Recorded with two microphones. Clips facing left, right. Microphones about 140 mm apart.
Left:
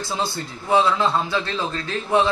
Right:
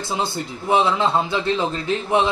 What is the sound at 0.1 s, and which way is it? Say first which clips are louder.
A man's voice: right 3 dB; 20° right (ahead or behind).